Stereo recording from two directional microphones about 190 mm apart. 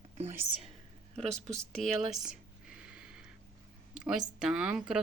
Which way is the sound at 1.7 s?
Centre (ahead or behind).